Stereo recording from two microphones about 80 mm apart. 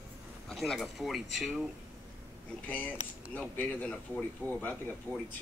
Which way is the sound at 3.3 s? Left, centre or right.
Centre.